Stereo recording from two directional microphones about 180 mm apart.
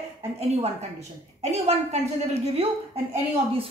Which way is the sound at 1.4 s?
35° right (ahead or behind).